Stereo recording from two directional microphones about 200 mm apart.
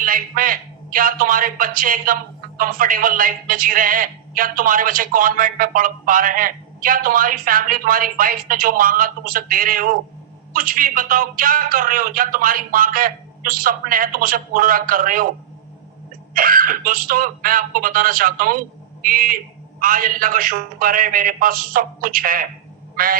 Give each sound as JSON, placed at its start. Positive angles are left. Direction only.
{"t": 0.0, "sound": "speech", "side_deg": -45}
{"t": 16.3, "sound": "speech", "side_deg": -45}